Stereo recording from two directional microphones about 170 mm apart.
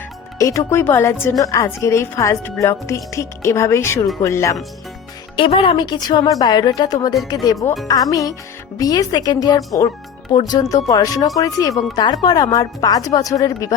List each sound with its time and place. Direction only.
0.3 s a woman's voice: 20° left (ahead or behind)
5.4 s speech: 30° left (ahead or behind)